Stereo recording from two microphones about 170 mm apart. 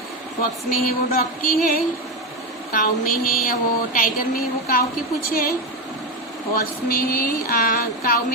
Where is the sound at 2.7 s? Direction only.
60° left (ahead or behind).